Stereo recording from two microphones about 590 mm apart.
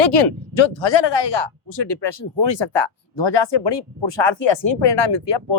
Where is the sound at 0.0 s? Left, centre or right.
Left.